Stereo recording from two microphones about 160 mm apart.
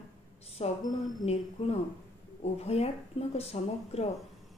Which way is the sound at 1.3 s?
40° left (ahead or behind).